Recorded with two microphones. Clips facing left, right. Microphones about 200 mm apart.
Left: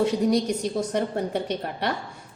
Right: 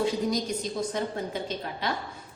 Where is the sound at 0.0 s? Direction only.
70° left (ahead or behind).